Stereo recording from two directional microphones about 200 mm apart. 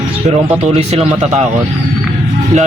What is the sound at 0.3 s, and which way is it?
A man's voice, 35° right (ahead or behind).